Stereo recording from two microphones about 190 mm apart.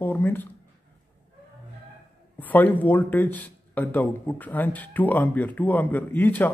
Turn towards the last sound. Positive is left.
turn(degrees=10)  # may be behind; listen again after turning